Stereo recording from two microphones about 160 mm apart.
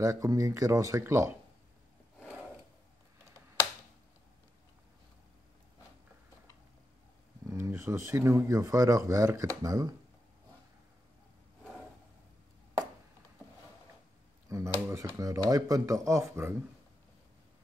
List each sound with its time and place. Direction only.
0.0 s speech: 20° right (ahead or behind)
2.1 s a sound: 10° right (ahead or behind)
7.4 s speech: 15° right (ahead or behind)
14.5 s speech: 20° right (ahead or behind)